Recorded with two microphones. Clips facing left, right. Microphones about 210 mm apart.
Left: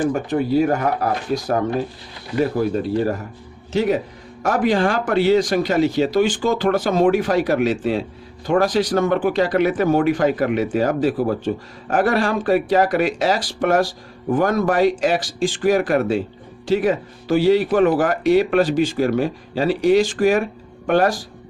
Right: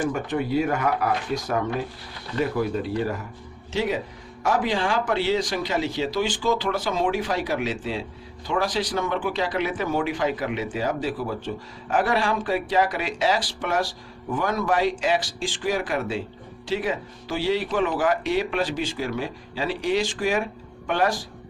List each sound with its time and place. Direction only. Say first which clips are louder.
0.0 s speech: left 5 dB; 40° left (ahead or behind)